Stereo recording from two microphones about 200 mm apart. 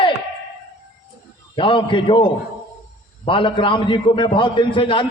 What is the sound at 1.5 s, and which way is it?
A man's voice, 25° left (ahead or behind).